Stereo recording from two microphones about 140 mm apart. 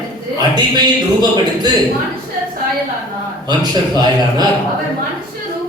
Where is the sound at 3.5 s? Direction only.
30° right (ahead or behind).